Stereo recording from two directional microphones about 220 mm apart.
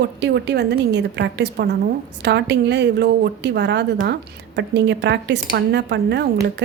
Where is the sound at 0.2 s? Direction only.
50° right (ahead or behind).